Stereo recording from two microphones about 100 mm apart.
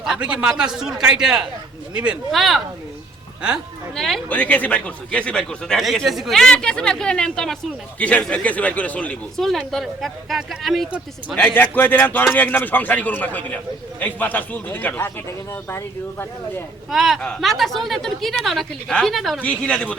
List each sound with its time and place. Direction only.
0.0 s a man's voice: 10° right (ahead or behind)
2.3 s speech: centre (ahead or behind)
3.9 s speech: 5° left (ahead or behind)
4.3 s a man's voice: 15° left (ahead or behind)
9.4 s speech: centre (ahead or behind)
11.3 s a man's voice: 15° left (ahead or behind)
16.9 s speech: centre (ahead or behind)
19.4 s a man's voice: 10° left (ahead or behind)